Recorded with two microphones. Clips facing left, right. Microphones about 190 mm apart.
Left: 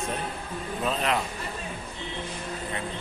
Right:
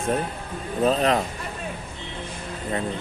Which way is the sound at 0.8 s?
40° right (ahead or behind).